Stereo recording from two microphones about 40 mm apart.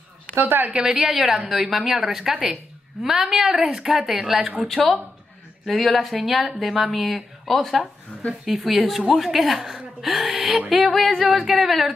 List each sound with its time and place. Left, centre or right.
0.4 s speech: right
0.7 s a woman's voice: centre
1.1 s a woman's voice: centre
4.4 s speech: right
5.7 s speech: centre
8.1 s a sound: left
8.5 s speech: centre
9.6 s gasp: centre
10.1 s speech: centre